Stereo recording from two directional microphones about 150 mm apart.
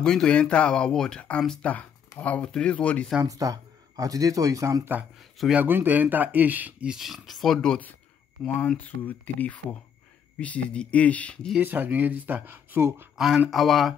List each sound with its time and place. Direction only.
0.0 s speech: 5° left (ahead or behind)
3.2 s speech: 20° right (ahead or behind); by 11.5 s 10° left (ahead or behind)
11.5 s speech: 10° right (ahead or behind)
13.2 s speech: 5° right (ahead or behind)